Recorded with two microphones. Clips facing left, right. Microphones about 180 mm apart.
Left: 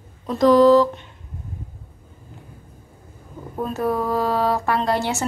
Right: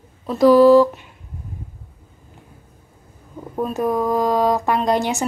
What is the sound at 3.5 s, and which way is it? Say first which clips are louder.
Speech: right 2 dB; 15° right (ahead or behind).